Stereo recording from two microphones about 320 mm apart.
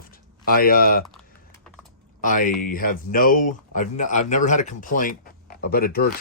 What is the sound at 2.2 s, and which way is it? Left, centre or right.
Speech, left.